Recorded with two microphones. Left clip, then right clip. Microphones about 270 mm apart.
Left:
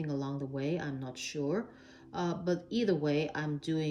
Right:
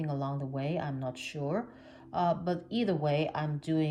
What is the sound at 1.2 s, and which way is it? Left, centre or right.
Speech, centre.